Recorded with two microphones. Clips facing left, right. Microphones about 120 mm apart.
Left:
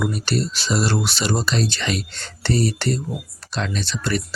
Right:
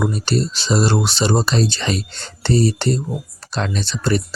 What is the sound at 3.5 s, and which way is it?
Speech, 40° right (ahead or behind).